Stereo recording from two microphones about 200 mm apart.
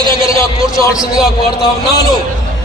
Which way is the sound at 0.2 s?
15° left (ahead or behind).